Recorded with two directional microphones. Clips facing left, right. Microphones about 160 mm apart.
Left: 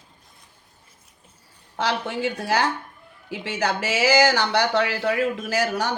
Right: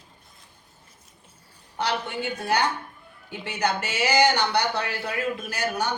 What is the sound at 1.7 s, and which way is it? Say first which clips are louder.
Speech: left 2 dB; 90° left.